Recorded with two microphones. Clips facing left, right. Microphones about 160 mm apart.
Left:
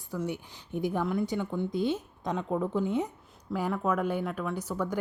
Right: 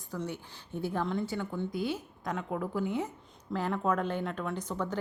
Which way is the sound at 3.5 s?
10° left (ahead or behind).